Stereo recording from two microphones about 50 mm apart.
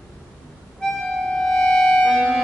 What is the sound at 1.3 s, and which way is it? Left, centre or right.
Music, centre.